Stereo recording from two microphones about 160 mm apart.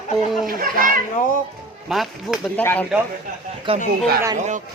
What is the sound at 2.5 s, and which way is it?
Speech, 10° left (ahead or behind).